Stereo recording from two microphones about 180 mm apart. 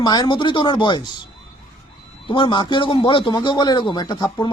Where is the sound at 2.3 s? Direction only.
25° left (ahead or behind).